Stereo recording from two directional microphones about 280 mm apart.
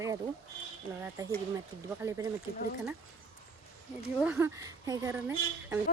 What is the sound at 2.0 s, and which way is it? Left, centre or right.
Speech, centre.